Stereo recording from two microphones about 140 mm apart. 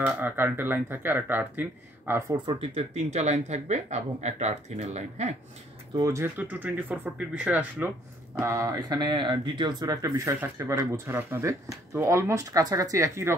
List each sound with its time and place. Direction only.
0.0 s speech: 15° right (ahead or behind)
2.7 s speech: 50° right (ahead or behind)
5.9 s speech: 20° right (ahead or behind)
8.4 s speech: 25° right (ahead or behind)